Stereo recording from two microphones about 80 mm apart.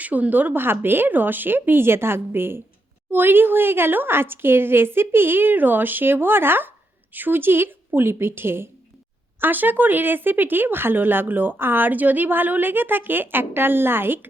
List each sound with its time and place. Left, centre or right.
0.0 s speech: centre